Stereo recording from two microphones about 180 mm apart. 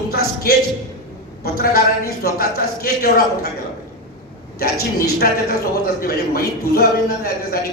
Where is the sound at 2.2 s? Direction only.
60° left (ahead or behind).